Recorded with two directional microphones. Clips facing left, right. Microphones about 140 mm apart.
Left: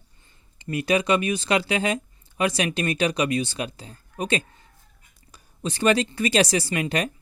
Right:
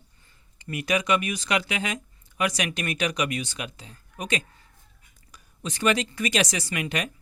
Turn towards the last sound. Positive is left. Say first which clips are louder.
# left 4 dB
turn(degrees=35)  # may be behind; listen again after turning